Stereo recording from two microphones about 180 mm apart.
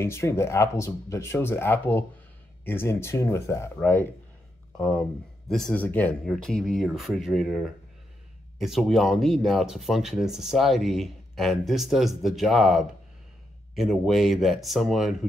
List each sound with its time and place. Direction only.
0.0 s speech: 15° left (ahead or behind); by 15.1 s centre (ahead or behind)